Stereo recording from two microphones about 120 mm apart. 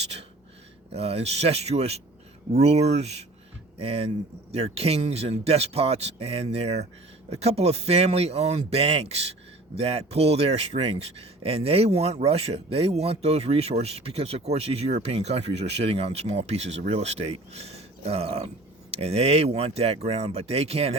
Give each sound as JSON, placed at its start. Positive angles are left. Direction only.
{"t": 0.9, "sound": "speech", "side_deg": -55}